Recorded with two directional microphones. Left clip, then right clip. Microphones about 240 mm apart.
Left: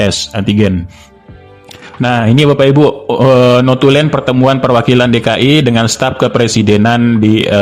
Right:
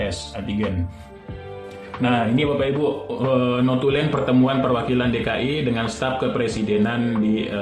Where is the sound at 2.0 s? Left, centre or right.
Left.